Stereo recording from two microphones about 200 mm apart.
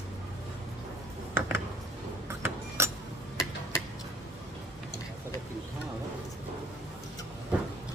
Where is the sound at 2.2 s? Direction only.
15° right (ahead or behind).